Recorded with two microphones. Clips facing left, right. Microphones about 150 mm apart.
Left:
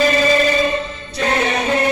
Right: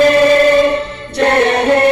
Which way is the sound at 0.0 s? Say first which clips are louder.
Right 7 dB; 60° right (ahead or behind).